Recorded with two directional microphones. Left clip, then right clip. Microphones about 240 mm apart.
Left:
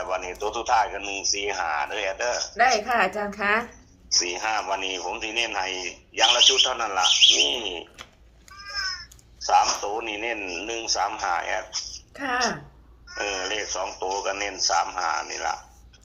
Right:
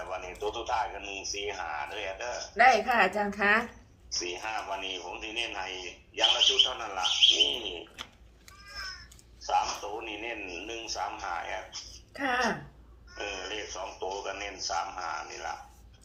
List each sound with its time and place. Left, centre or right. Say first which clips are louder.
0.0 s a man's voice: left 7 dB; left
2.6 s speech: left 1 dB; centre
4.1 s a man's voice: left 10 dB; left
12.1 s speech: left 3 dB; centre
13.1 s a man's voice: left 9 dB; left